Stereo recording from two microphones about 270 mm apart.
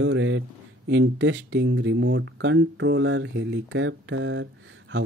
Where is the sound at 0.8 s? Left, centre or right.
Right.